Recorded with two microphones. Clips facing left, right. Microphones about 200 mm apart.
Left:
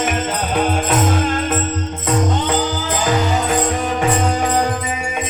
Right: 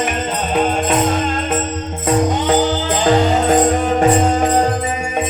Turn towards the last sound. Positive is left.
turn(degrees=-35)  # may be behind; listen again after turning